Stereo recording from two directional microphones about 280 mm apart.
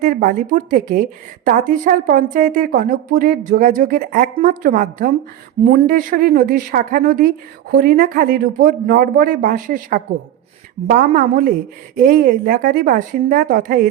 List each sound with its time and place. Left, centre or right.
0.0 s a woman's voice: right